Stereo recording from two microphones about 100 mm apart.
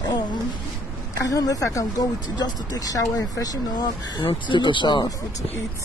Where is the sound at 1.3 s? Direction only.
35° left (ahead or behind).